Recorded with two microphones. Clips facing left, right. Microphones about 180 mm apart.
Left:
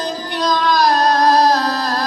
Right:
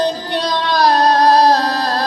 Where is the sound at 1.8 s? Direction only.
30° right (ahead or behind).